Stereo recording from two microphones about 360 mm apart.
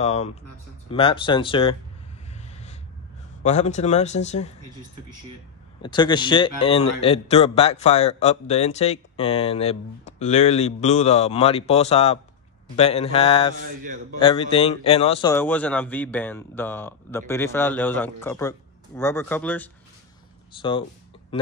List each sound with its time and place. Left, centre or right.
0.0 s a man's voice: centre
3.4 s speech: centre
5.8 s a man's voice: centre
21.3 s a man's voice: centre